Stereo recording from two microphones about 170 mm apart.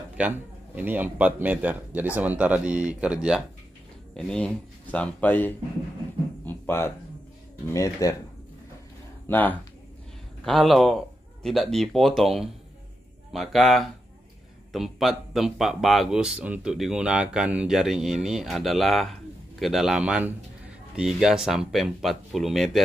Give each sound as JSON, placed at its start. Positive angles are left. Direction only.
{"t": 0.2, "sound": "a man's voice", "side_deg": -10}
{"t": 6.4, "sound": "music", "side_deg": 15}
{"t": 7.6, "sound": "speech", "side_deg": 20}
{"t": 9.3, "sound": "speech", "side_deg": 10}